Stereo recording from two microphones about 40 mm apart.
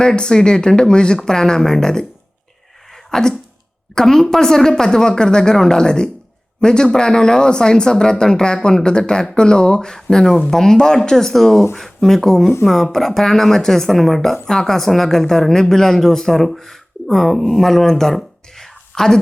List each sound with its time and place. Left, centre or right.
0.0 s a woman's voice: left
3.1 s cough: centre
3.9 s a woman's voice: centre